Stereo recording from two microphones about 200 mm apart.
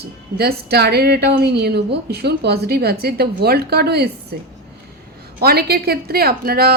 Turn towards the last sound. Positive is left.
turn(degrees=-50)  # may be behind; listen again after turning